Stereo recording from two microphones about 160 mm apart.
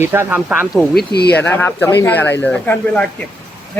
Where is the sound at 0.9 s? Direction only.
85° left.